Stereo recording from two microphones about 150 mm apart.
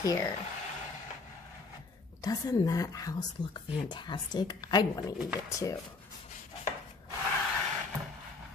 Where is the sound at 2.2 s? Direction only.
25° left (ahead or behind).